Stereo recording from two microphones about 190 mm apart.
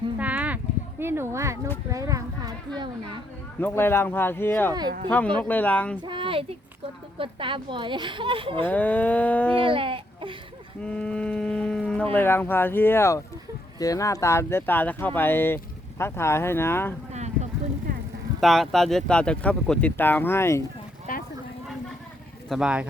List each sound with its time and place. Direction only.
0.2 s a sound: 10° right (ahead or behind)
1.9 s speech: 15° right (ahead or behind)
3.6 s speech: 10° left (ahead or behind)
6.0 s speech: 25° right (ahead or behind)
8.6 s speech: 10° left (ahead or behind)
9.6 s speech: 30° right (ahead or behind)
10.8 s speech: 5° left (ahead or behind)
17.1 s a sound: 35° right (ahead or behind)
18.3 s speech: centre (ahead or behind)
21.1 s a sound: 45° left (ahead or behind)
22.4 s speech: centre (ahead or behind)